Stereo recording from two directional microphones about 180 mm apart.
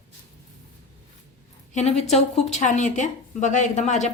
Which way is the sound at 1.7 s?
40° left (ahead or behind).